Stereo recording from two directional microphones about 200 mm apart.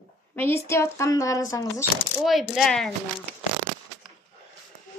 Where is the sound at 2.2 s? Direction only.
Centre (ahead or behind).